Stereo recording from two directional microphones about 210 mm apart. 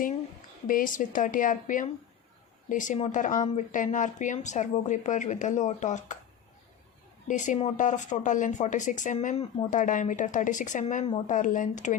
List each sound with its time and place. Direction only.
0.7 s speech: 40° left (ahead or behind)
7.3 s speech: 35° left (ahead or behind)